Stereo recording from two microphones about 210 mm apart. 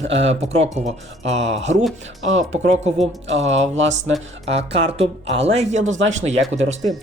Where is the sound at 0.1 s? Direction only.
30° right (ahead or behind).